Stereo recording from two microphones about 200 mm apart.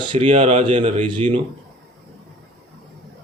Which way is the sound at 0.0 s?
25° right (ahead or behind).